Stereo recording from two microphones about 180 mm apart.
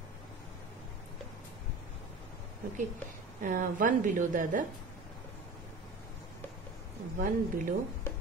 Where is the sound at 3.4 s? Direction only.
45° right (ahead or behind).